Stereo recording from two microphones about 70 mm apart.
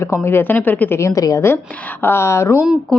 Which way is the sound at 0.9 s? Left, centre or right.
Left.